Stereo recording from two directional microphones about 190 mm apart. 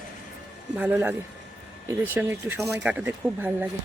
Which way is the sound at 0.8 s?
10° right (ahead or behind).